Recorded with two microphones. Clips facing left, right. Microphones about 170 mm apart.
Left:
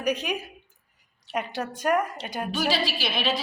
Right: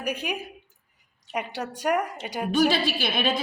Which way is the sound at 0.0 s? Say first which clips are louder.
Left 3 dB; 10° right (ahead or behind).